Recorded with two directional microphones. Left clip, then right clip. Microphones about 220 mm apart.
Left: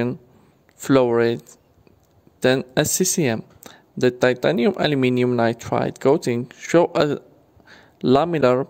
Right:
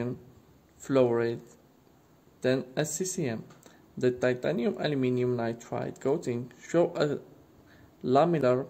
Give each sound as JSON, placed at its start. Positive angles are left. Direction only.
{"t": 0.7, "sound": "speech", "side_deg": 45}
{"t": 2.4, "sound": "speech", "side_deg": 45}
{"t": 7.6, "sound": "a sound", "side_deg": 45}